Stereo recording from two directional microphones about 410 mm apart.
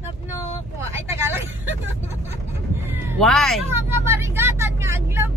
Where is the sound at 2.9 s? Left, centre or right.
Centre.